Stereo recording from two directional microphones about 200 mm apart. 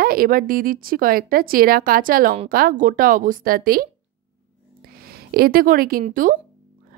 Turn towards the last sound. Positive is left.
turn(degrees=-45)  # may be behind; listen again after turning